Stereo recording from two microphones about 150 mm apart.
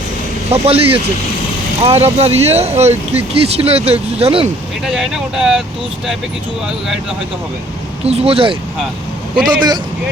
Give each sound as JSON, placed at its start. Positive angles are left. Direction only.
{"t": 0.5, "sound": "speech", "side_deg": -40}
{"t": 4.9, "sound": "speech", "side_deg": -5}
{"t": 8.0, "sound": "a man's voice", "side_deg": -45}